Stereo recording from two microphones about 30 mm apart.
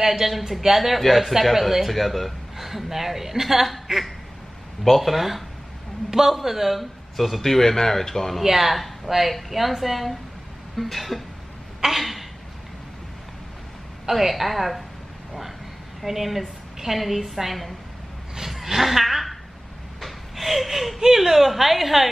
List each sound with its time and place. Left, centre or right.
0.2 s a woman's voice: centre
2.5 s a woman's voice: centre
6.0 s a woman's voice: centre
8.5 s a woman's voice: centre
11.8 s a sound: centre
14.1 s a woman's voice: centre
16.0 s a woman's voice: centre
18.5 s speech: centre
20.0 s gasp: centre
21.0 s a woman's voice: centre